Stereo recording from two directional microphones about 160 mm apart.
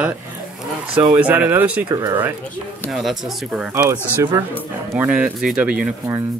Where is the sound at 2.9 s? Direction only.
Centre (ahead or behind).